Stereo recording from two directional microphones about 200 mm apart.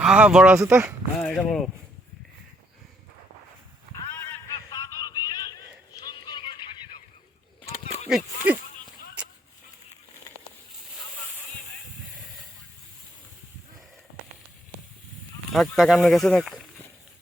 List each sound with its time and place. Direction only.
0.0 s speech: 5° right (ahead or behind)
3.9 s a sound: 15° left (ahead or behind)
8.0 s speech: 5° right (ahead or behind)
15.5 s speech: centre (ahead or behind)